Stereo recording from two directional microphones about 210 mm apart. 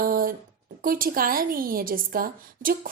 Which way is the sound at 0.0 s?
45° right (ahead or behind).